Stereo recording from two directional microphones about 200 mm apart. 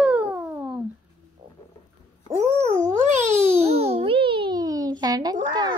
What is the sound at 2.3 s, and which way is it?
Cat, 10° right (ahead or behind).